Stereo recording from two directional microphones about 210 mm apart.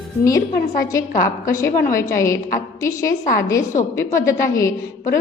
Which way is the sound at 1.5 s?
15° left (ahead or behind).